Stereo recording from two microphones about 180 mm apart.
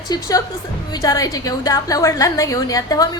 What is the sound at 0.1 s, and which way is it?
A woman's voice, 20° left (ahead or behind).